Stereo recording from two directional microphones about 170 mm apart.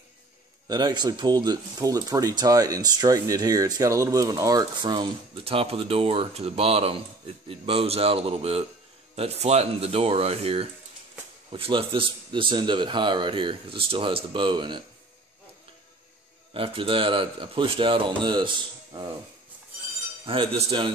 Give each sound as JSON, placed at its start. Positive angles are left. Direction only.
{"t": 0.7, "sound": "a man's voice", "side_deg": -25}
{"t": 16.5, "sound": "a man's voice", "side_deg": -30}
{"t": 20.2, "sound": "a man's voice", "side_deg": -30}